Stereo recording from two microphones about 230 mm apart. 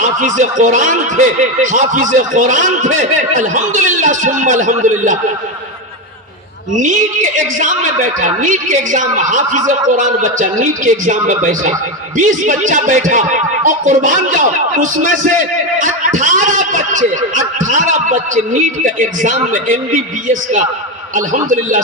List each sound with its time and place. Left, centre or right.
0.0 s speech: right
6.7 s speech: right